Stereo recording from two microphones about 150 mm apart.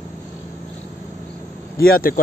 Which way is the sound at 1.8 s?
80° left.